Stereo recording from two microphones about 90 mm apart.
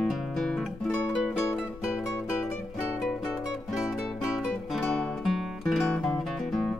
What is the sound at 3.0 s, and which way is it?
Music, 5° right (ahead or behind).